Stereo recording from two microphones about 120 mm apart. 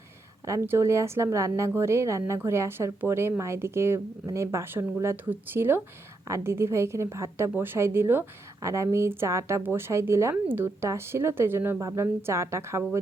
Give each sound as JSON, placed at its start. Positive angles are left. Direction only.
{"t": 0.4, "sound": "a woman's voice", "side_deg": -25}